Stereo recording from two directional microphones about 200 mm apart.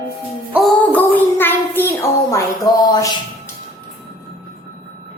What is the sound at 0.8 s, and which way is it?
Child singing, 10° left (ahead or behind).